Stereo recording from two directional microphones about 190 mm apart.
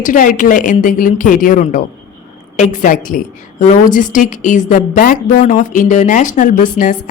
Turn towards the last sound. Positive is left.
turn(degrees=45)  # may be behind; listen again after turning